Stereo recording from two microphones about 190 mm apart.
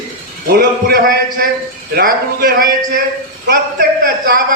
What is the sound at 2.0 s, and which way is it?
Speech, 50° right (ahead or behind).